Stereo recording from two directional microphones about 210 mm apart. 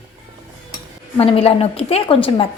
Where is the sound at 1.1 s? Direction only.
30° left (ahead or behind).